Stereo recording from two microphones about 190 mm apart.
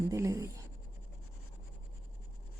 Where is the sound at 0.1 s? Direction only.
15° right (ahead or behind).